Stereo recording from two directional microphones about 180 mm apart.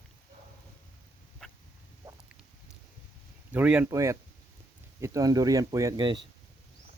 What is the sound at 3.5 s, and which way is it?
Speech, 10° right (ahead or behind).